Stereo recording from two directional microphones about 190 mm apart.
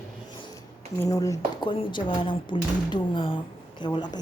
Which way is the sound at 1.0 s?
15° left (ahead or behind).